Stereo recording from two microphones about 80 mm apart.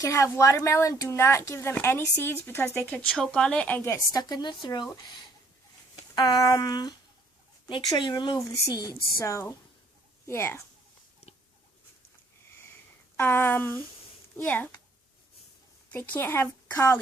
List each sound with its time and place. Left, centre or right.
0.0 s speech: left
2.9 s speech: centre
4.1 s a sound: left
4.6 s speech: left
6.1 s a sound: left
7.9 s speech: left
8.7 s a sound: left
9.1 s speech: left
13.1 s speech: left
15.9 s speech: left